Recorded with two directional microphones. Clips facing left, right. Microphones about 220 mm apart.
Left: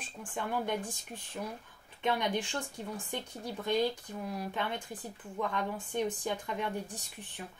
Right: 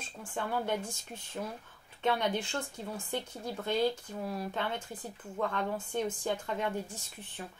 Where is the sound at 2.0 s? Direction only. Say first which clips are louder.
Right 1 dB; 15° left (ahead or behind).